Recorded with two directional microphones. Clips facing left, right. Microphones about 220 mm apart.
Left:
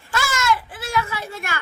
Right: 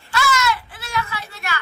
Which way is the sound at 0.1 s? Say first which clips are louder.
Right 1 dB; 45° left (ahead or behind).